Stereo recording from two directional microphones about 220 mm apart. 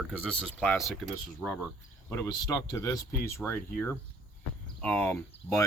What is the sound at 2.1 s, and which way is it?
Speech, 15° left (ahead or behind).